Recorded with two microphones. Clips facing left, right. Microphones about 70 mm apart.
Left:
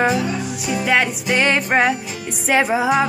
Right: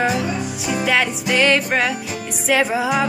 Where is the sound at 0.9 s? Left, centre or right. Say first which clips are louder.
Left 1 dB; centre.